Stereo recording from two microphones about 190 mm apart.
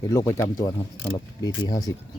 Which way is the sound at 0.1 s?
15° left (ahead or behind).